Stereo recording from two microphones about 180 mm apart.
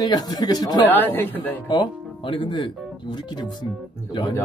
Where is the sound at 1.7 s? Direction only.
25° left (ahead or behind).